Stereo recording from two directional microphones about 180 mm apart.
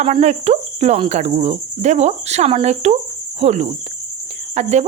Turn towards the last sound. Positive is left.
turn(degrees=-40)  # may be behind; listen again after turning